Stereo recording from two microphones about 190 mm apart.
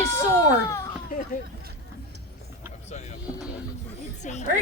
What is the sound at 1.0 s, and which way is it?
Speech, 45° left (ahead or behind).